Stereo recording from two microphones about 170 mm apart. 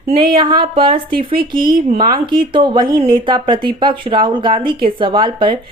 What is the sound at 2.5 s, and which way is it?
A woman's voice, 25° right (ahead or behind).